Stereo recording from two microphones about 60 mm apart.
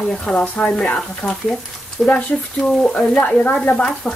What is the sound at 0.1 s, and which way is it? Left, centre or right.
Speech, centre.